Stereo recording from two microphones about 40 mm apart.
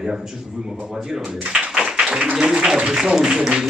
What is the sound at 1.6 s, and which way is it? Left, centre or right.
Tap, centre.